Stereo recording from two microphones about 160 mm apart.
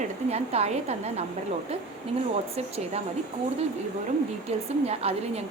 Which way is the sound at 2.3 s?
40° right (ahead or behind).